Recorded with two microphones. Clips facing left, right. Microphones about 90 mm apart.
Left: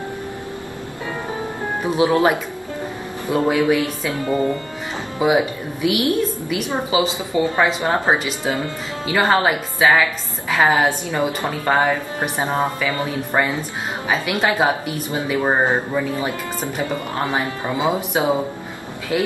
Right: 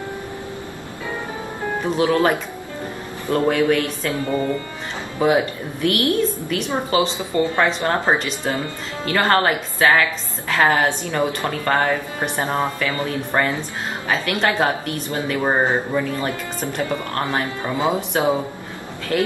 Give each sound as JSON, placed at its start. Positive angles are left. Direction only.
{"t": 2.0, "sound": "a woman's voice", "side_deg": 20}